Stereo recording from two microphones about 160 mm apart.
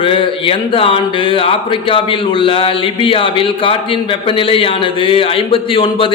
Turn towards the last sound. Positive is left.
turn(degrees=35)  # may be behind; listen again after turning